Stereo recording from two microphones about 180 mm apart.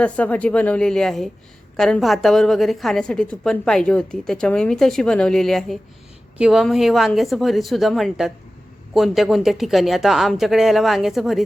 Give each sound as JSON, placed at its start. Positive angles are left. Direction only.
{"t": 0.0, "sound": "a woman's voice", "side_deg": 10}